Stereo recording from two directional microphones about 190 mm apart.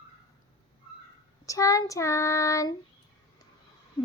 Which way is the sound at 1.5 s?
15° left (ahead or behind).